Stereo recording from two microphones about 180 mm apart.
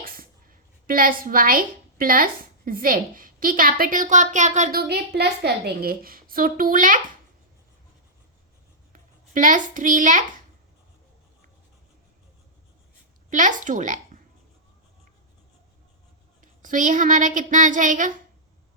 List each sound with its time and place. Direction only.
0.0 s speech: 55° right (ahead or behind)
4.8 s a woman's voice: 65° right (ahead or behind); by 7.0 s 50° right (ahead or behind)
8.9 s a child's voice: 45° right (ahead or behind)
13.3 s speech: 45° right (ahead or behind)
16.4 s speech: 45° right (ahead or behind)